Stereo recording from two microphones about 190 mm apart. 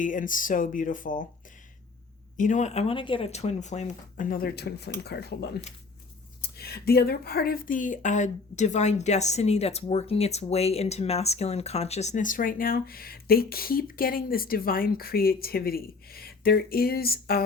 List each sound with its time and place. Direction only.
0.0 s speech: 45° left (ahead or behind)
2.4 s speech: 40° left (ahead or behind)